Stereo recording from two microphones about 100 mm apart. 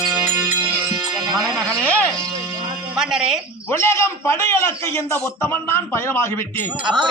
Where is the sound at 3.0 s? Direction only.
5° right (ahead or behind).